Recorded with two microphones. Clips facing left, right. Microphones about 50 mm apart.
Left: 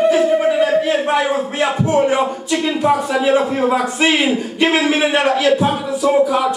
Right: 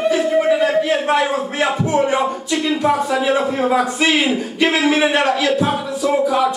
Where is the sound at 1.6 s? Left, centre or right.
Centre.